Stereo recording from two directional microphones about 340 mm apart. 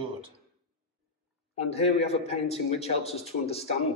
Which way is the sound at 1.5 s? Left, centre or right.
Centre.